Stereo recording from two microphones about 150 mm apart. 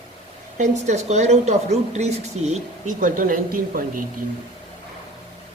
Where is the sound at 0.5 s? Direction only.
50° right (ahead or behind); by 4.0 s 70° right (ahead or behind).